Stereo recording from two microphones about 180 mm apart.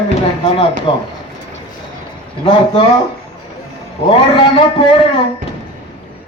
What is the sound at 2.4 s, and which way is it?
Speech, 30° left (ahead or behind).